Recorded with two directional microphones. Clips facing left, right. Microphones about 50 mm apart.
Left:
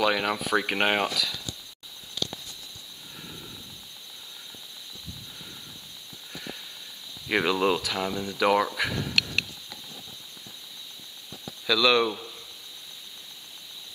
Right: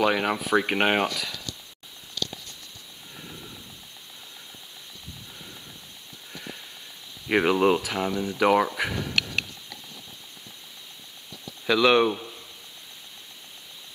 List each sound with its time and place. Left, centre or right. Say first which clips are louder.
0.0 s speech: right 2 dB; centre
2.2 s patter: even; centre
6.3 s sniff: even; centre
7.2 s speech: right 3 dB; centre
9.0 s a sound: even; centre
11.6 s speech: right 3 dB; right